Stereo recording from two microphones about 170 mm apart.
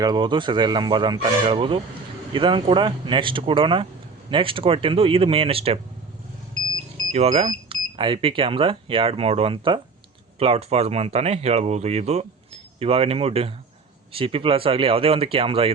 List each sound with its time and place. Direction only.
0.0 s speech: 25° right (ahead or behind)
7.1 s speech: 40° right (ahead or behind)